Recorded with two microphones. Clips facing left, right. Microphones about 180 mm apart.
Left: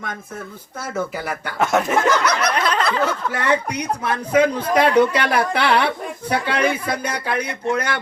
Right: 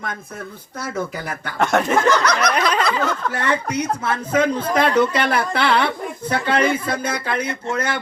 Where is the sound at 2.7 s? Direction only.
10° right (ahead or behind).